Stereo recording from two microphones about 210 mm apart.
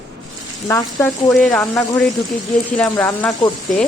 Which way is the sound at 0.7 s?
5° left (ahead or behind).